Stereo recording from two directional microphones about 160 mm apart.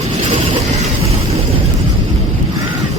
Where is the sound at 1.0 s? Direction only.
40° right (ahead or behind).